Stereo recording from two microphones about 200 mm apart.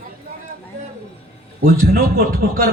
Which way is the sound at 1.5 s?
45° right (ahead or behind).